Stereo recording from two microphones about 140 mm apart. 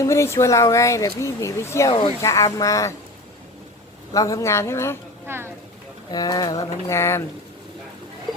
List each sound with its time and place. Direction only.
0.0 s speech: 20° left (ahead or behind)
1.9 s speech: 35° left (ahead or behind)
2.2 s speech: 20° left (ahead or behind)
4.1 s speech: 25° left (ahead or behind)
5.2 s speech: 15° right (ahead or behind)
6.1 s speech: 30° left (ahead or behind)